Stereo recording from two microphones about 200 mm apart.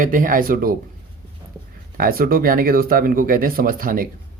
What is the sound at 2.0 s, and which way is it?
Speech, 45° right (ahead or behind).